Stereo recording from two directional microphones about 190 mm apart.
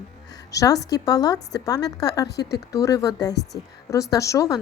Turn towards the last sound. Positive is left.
turn(degrees=15)  # may be behind; listen again after turning